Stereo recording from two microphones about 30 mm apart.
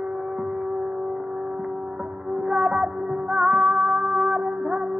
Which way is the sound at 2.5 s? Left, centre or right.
Centre.